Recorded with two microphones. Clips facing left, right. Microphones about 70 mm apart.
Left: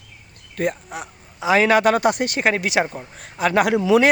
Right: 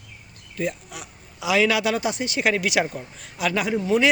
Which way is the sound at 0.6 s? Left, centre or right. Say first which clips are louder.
Left 4 dB; left.